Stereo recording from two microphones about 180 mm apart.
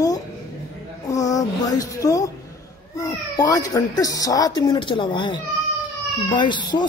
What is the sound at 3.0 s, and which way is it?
Speech, 20° left (ahead or behind).